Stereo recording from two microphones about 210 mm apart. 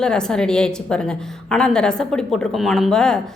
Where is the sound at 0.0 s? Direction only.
5° left (ahead or behind).